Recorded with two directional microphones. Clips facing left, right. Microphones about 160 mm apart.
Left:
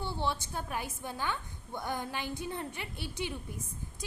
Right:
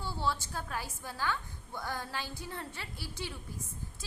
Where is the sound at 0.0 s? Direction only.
20° left (ahead or behind).